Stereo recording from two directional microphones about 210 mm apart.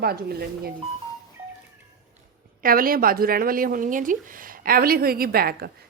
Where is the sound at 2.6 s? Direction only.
45° right (ahead or behind).